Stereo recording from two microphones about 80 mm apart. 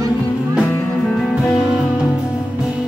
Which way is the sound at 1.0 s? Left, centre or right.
Centre.